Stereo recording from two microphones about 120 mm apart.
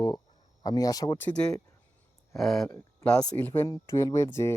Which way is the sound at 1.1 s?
10° left (ahead or behind).